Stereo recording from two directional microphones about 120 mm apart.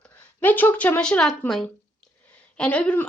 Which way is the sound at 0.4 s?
15° left (ahead or behind).